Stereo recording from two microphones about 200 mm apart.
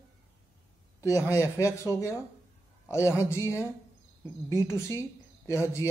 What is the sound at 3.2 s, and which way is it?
A woman's voice, 15° left (ahead or behind).